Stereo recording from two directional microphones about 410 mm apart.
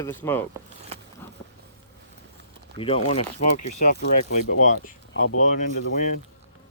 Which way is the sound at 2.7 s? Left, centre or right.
Centre.